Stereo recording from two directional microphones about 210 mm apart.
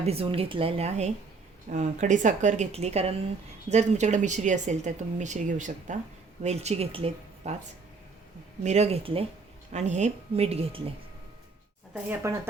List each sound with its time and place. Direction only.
0.0 s a woman's voice: 30° right (ahead or behind)
8.6 s a woman's voice: 30° right (ahead or behind)
12.2 s speech: 15° right (ahead or behind)